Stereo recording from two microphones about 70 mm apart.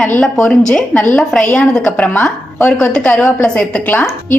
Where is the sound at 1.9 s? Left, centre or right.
Left.